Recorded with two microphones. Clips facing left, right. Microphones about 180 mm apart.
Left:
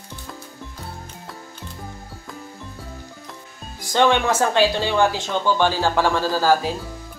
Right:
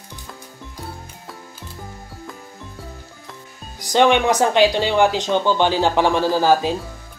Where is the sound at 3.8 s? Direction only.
15° right (ahead or behind).